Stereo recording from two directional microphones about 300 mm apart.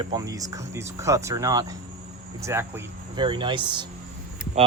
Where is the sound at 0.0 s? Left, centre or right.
Centre.